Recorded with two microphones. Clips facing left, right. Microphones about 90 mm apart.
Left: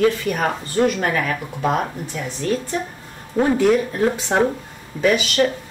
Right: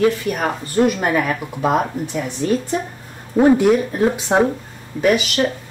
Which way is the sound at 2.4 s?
20° right (ahead or behind).